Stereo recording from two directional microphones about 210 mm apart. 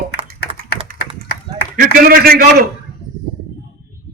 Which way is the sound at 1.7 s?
45° right (ahead or behind).